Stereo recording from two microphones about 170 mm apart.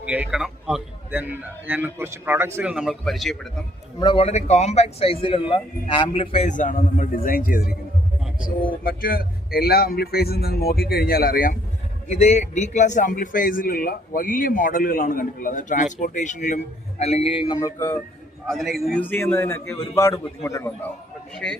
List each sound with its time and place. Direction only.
0.0 s a man's voice: 10° right (ahead or behind)
4.0 s speech: 35° left (ahead or behind); by 7.8 s 55° left (ahead or behind)
8.8 s a man's voice: 60° left (ahead or behind)
12.0 s a man's voice: 40° left (ahead or behind)
17.6 s a man's voice: 15° left (ahead or behind)
18.4 s a man's voice: centre (ahead or behind)